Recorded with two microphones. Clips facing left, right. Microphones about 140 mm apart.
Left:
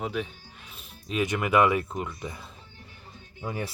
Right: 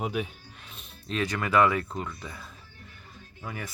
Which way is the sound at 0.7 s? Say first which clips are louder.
Left 2 dB; 10° left (ahead or behind).